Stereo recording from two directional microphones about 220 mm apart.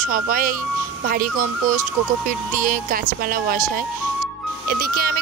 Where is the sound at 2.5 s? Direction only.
40° right (ahead or behind).